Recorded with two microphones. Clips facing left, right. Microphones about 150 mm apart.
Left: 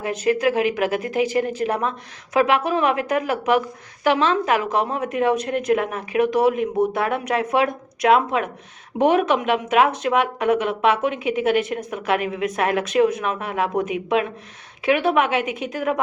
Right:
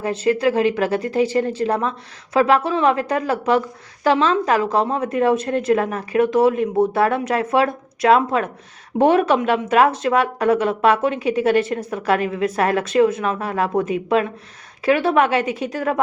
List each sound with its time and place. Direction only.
0.0 s a woman's voice: 30° right (ahead or behind)